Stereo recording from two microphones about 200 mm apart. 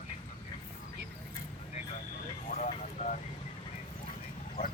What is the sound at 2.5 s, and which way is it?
Vehicle, 35° left (ahead or behind).